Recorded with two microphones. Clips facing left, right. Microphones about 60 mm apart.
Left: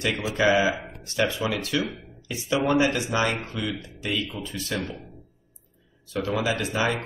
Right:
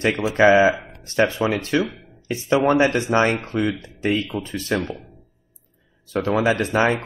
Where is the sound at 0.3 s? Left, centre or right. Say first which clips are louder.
Right 7 dB; right.